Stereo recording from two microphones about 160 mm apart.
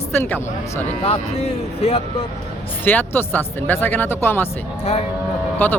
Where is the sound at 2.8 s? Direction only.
10° left (ahead or behind).